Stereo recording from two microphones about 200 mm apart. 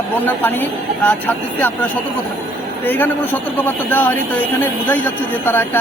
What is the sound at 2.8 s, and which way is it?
Speech, 10° left (ahead or behind).